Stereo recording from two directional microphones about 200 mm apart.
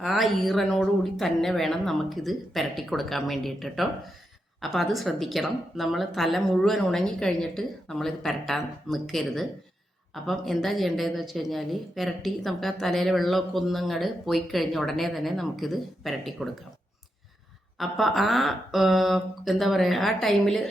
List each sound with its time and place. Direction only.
0.0 s a woman's voice: centre (ahead or behind)
17.7 s a woman's voice: centre (ahead or behind)